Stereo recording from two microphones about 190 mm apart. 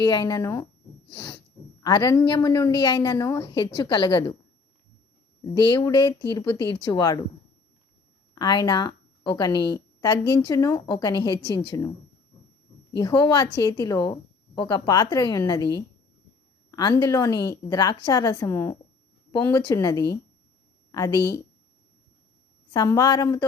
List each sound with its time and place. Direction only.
0.0 s a woman's voice: 25° left (ahead or behind)
5.4 s a woman's voice: 25° left (ahead or behind)
8.4 s a woman's voice: 20° left (ahead or behind)
13.0 s a woman's voice: 20° left (ahead or behind)
16.7 s a woman's voice: 20° left (ahead or behind)
22.7 s a woman's voice: 20° left (ahead or behind)